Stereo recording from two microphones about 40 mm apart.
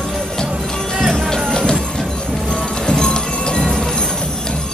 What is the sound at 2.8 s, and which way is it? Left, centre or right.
Music, centre.